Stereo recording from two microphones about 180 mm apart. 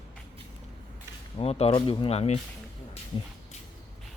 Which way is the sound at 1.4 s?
35° left (ahead or behind).